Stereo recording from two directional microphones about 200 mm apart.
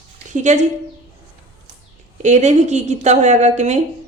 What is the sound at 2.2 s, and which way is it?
Speech, 35° right (ahead or behind).